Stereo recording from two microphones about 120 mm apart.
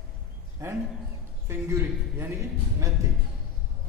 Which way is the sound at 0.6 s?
25° right (ahead or behind).